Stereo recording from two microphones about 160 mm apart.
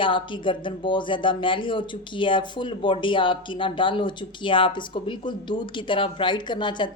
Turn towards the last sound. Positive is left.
turn(degrees=30)  # may be behind; listen again after turning